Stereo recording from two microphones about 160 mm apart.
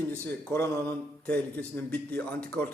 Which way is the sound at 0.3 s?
15° left (ahead or behind).